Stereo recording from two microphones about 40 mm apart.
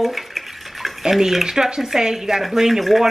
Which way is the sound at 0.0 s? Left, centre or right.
Centre.